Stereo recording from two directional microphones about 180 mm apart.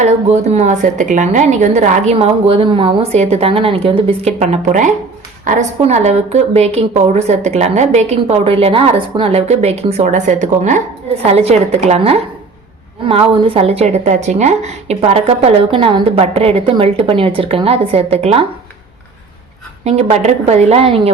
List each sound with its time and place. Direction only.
0.0 s a woman's voice: 40° right (ahead or behind)
19.8 s a woman's voice: 35° right (ahead or behind)